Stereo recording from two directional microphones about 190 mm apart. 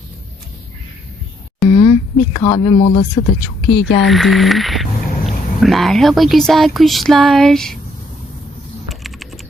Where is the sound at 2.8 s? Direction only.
35° left (ahead or behind).